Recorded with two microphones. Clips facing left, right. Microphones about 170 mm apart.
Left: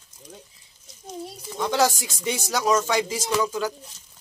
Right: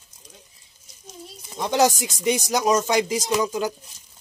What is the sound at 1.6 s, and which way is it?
Speech, 20° right (ahead or behind).